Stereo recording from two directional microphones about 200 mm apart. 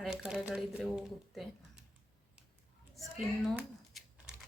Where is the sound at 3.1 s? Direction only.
Centre (ahead or behind).